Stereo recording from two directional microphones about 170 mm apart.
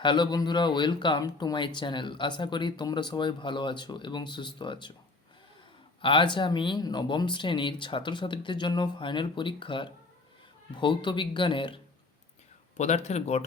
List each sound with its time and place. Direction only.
0.0 s speech: 25° left (ahead or behind)
6.0 s speech: 30° left (ahead or behind)
12.7 s speech: 45° left (ahead or behind)